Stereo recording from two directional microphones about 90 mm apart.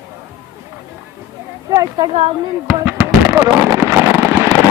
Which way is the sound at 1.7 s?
50° right (ahead or behind).